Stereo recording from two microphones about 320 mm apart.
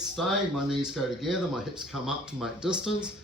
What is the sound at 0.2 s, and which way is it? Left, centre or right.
Speech, centre.